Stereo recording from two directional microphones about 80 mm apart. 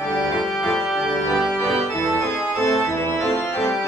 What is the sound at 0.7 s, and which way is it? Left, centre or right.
Organ, centre.